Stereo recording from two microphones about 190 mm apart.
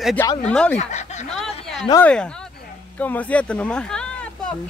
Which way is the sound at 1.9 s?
5° left (ahead or behind).